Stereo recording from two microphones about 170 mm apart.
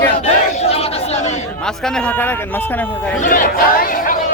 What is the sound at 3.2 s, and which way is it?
Music, 50° left (ahead or behind).